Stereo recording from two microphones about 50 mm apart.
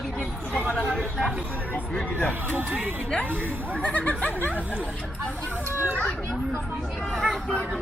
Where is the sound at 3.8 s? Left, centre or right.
Left.